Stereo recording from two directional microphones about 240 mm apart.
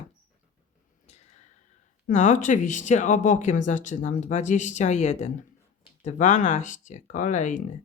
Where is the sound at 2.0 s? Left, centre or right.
Left.